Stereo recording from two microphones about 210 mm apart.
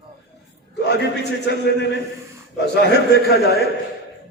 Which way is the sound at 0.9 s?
55° left (ahead or behind).